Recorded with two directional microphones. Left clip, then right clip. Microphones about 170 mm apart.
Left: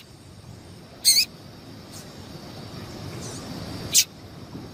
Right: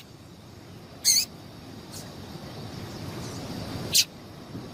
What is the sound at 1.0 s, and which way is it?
Rodents, 10° left (ahead or behind).